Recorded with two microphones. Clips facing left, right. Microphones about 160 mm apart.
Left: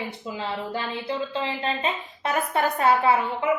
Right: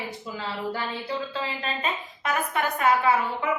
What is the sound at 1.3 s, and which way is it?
A woman's voice, 30° left (ahead or behind).